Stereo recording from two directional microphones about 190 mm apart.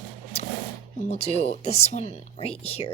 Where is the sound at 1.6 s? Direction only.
35° left (ahead or behind).